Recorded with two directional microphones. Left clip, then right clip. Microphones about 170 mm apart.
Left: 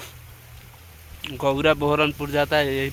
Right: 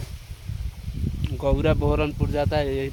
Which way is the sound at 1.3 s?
10° left (ahead or behind).